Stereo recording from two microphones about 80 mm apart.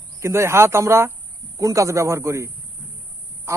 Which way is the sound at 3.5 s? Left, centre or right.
Right.